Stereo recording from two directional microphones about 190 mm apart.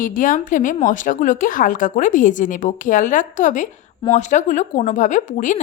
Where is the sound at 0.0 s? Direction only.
45° left (ahead or behind).